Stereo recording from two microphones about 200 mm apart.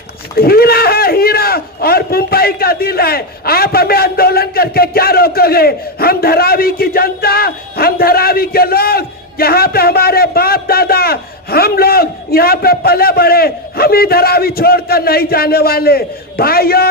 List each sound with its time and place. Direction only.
0.3 s a man's voice: 50° left (ahead or behind)